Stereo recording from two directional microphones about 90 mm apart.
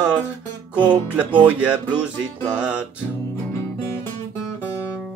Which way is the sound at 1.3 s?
15° right (ahead or behind).